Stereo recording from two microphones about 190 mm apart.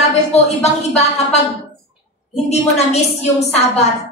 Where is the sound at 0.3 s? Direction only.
35° left (ahead or behind).